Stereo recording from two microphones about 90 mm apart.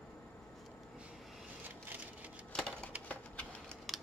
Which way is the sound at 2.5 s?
10° left (ahead or behind).